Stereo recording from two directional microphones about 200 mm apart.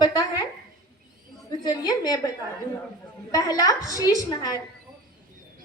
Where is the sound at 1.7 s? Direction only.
20° left (ahead or behind).